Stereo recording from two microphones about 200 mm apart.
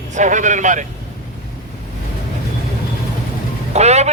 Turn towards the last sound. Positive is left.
turn(degrees=-35)  # may be behind; listen again after turning